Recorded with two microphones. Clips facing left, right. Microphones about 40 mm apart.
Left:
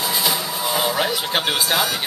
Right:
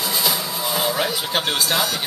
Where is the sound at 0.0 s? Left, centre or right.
Centre.